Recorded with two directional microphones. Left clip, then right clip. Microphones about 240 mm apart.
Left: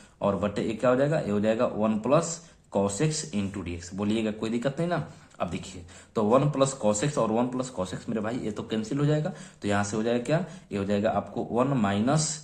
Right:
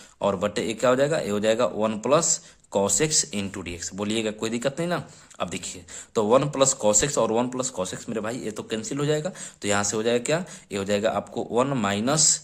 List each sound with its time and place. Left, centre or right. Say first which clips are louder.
0.2 s speech: right 3 dB; right